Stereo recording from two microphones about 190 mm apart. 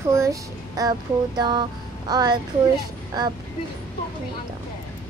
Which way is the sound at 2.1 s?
20° right (ahead or behind).